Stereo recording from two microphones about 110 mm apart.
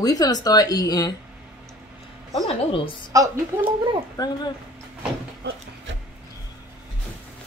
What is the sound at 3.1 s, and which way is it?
Speech, 30° right (ahead or behind).